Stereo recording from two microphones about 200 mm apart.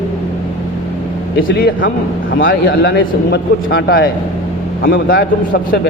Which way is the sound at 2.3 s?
45° left (ahead or behind).